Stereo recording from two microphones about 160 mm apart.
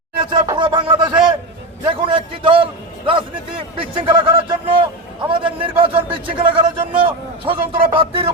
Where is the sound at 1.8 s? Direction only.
30° right (ahead or behind).